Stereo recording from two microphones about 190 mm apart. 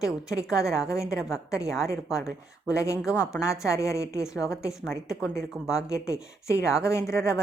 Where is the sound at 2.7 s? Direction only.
15° left (ahead or behind).